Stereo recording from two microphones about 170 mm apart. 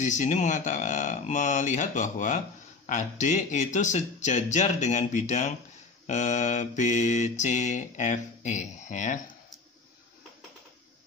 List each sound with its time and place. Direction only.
0.0 s mantra: 45° left (ahead or behind)